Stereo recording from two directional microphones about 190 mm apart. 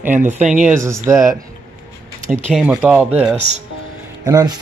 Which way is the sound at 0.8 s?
15° right (ahead or behind).